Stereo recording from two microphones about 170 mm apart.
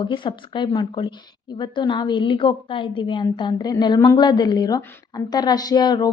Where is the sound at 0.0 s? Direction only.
30° left (ahead or behind).